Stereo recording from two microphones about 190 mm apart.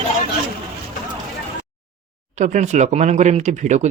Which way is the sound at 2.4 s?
40° right (ahead or behind).